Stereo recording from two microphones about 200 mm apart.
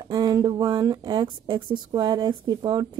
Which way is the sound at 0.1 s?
20° right (ahead or behind).